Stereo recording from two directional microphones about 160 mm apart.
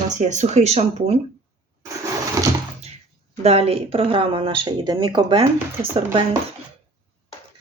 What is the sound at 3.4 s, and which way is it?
Speech, 40° right (ahead or behind).